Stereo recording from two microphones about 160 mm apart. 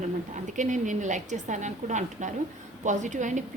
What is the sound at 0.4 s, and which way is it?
A woman's voice, 50° right (ahead or behind).